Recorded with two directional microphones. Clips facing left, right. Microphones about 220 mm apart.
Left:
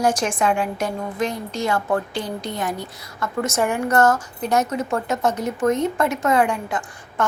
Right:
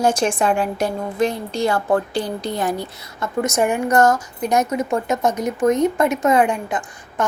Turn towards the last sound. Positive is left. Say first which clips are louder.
# right 2 dB
turn(degrees=-20)  # may be behind; listen again after turning